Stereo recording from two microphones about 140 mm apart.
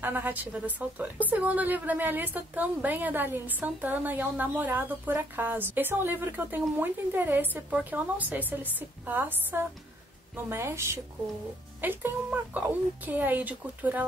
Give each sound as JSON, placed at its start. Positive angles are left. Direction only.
{"t": 0.0, "sound": "a woman's voice", "side_deg": -15}